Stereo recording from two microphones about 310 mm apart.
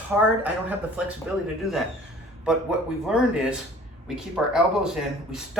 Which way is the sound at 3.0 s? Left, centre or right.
Centre.